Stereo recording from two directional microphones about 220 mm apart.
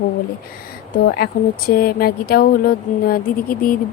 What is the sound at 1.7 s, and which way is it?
Speech, 40° left (ahead or behind).